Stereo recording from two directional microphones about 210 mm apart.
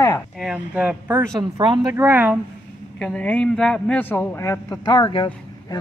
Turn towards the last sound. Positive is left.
turn(degrees=25)  # may be behind; listen again after turning